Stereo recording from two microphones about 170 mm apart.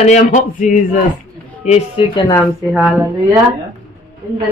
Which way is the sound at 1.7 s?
30° left (ahead or behind).